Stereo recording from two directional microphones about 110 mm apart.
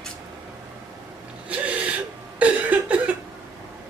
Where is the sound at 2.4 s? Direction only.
10° right (ahead or behind).